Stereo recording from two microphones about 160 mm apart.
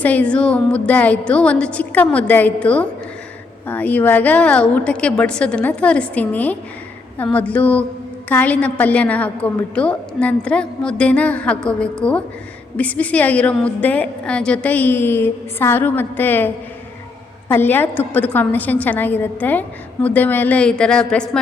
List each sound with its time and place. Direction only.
0.0 s a woman's voice: 10° left (ahead or behind)
17.5 s a woman's voice: 15° left (ahead or behind)